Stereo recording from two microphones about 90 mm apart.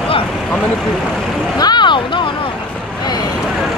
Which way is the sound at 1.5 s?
55° left (ahead or behind).